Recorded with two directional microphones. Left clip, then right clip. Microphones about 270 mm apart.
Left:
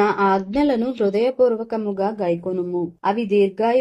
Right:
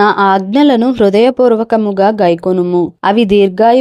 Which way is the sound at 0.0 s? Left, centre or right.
Right.